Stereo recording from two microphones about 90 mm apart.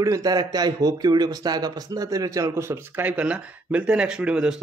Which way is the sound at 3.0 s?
15° right (ahead or behind).